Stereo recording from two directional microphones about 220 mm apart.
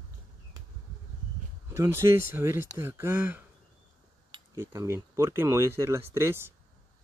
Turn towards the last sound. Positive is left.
turn(degrees=-10)  # may be behind; listen again after turning